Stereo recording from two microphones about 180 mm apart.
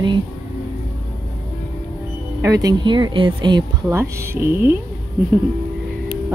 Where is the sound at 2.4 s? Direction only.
20° right (ahead or behind).